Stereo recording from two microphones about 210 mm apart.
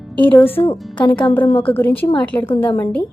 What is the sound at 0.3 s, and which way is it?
A woman's voice, 10° left (ahead or behind).